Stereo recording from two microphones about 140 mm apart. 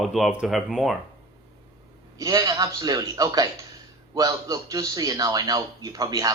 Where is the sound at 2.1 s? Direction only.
25° right (ahead or behind).